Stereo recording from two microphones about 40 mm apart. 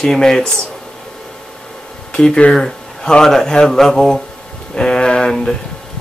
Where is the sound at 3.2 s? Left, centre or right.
Centre.